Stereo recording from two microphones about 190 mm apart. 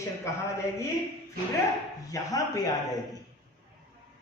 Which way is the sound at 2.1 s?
20° left (ahead or behind).